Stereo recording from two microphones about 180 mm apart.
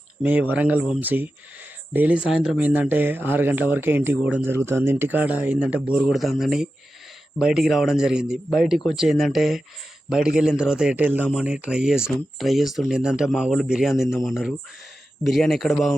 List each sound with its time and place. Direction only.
0.2 s speech: 10° right (ahead or behind)